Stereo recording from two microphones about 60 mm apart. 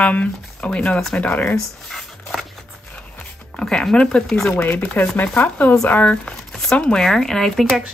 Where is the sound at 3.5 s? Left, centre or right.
Centre.